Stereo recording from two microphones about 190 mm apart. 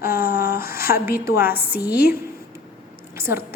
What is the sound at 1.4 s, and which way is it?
Speech, 55° left (ahead or behind).